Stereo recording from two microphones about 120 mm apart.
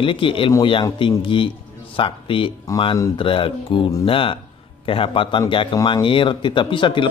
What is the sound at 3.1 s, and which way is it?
Speech, 45° left (ahead or behind).